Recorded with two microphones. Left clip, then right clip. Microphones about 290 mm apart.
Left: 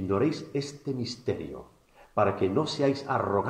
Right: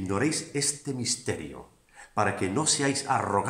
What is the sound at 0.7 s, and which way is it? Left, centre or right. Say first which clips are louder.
Speech: right 1 dB; right.